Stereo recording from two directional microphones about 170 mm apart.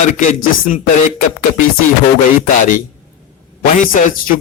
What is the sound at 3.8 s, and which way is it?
Speech, 50° left (ahead or behind).